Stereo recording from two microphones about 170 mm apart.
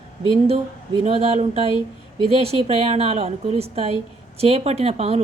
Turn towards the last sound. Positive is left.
turn(degrees=-35)  # may be behind; listen again after turning